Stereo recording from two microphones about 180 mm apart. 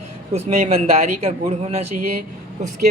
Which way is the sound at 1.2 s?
35° right (ahead or behind).